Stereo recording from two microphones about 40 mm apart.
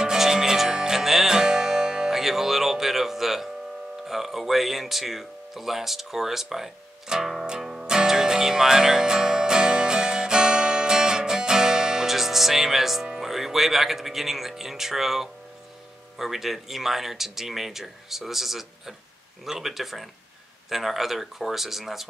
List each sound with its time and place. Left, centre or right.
0.0 s music: centre
4.0 s speech: centre
8.1 s music: centre
13.2 s speech: centre